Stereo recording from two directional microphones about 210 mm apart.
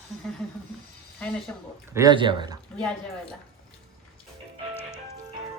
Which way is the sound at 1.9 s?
15° right (ahead or behind).